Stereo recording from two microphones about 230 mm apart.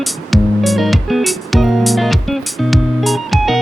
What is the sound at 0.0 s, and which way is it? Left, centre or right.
Music, centre.